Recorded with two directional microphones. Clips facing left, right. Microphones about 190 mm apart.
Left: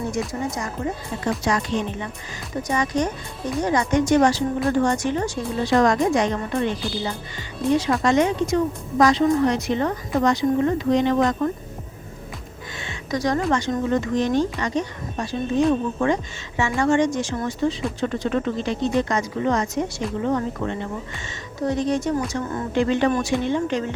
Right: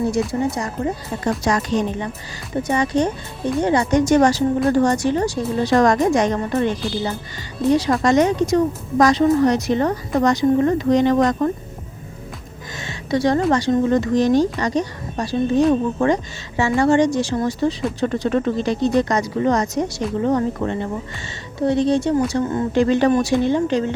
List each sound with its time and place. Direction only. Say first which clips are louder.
0.3 s a woman's voice: right 5 dB; 30° right (ahead or behind)
1.2 s a woman's voice: right 3 dB; 45° right (ahead or behind)
2.6 s a woman's voice: right 4 dB; 30° right (ahead or behind)
12.8 s a sound: right 5 dB; 35° right (ahead or behind)
13.5 s a woman's voice: right 5 dB; 35° right (ahead or behind)
22.7 s a woman's voice: right 3 dB; 40° right (ahead or behind)